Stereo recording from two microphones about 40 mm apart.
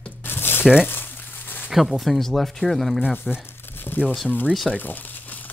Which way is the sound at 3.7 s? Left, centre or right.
Left.